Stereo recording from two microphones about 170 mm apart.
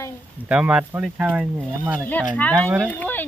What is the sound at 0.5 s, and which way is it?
Speech, 10° right (ahead or behind).